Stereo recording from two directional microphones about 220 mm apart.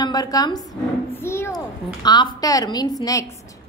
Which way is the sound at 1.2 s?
10° left (ahead or behind).